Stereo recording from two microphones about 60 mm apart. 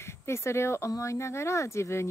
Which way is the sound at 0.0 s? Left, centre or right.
Left.